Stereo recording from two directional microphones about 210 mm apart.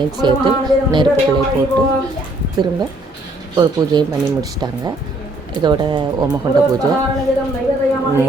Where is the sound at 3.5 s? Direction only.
20° right (ahead or behind).